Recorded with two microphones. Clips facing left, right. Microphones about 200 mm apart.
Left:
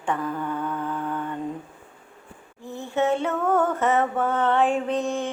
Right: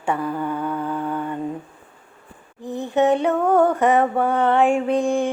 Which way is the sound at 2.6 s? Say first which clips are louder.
Right 5 dB; 15° right (ahead or behind).